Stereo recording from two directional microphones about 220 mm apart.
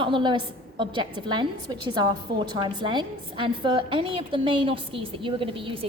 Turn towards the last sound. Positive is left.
turn(degrees=-25)  # may be behind; listen again after turning